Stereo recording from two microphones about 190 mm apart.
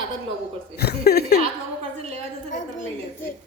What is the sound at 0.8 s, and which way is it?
Chuckle, 60° left (ahead or behind).